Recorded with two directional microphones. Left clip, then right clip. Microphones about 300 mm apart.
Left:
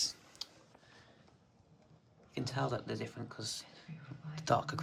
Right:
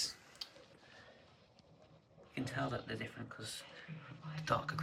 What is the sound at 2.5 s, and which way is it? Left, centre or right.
Speech, centre.